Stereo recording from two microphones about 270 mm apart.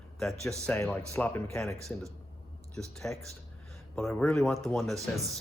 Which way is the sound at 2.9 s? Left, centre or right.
Centre.